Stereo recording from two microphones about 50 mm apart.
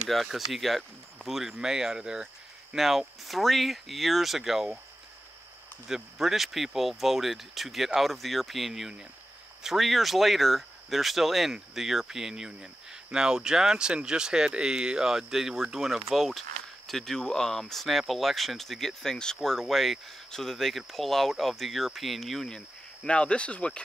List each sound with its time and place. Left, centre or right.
0.1 s speech: centre
5.9 s speech: centre
23.0 s speech: left